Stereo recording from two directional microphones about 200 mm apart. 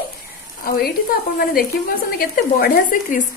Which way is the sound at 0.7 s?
50° left (ahead or behind).